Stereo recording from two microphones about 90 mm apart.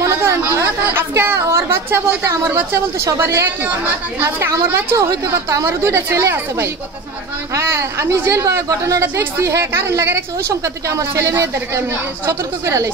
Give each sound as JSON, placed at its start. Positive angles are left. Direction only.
{"t": 0.0, "sound": "a woman's voice", "side_deg": -30}
{"t": 9.0, "sound": "speech", "side_deg": -25}
{"t": 9.4, "sound": "a woman's voice", "side_deg": -35}